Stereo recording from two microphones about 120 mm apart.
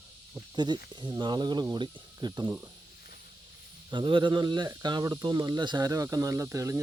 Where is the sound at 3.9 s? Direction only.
40° right (ahead or behind).